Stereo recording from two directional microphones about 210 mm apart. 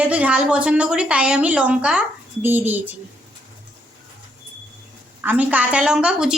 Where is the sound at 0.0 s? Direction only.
5° right (ahead or behind).